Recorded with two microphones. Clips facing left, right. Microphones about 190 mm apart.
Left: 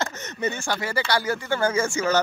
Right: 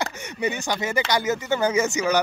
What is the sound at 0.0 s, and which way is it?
Speech, 15° right (ahead or behind).